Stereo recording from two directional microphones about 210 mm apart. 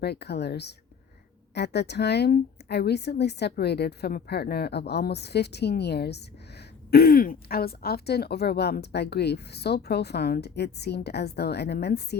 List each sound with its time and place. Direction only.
0.0 s a woman's voice: 50° left (ahead or behind)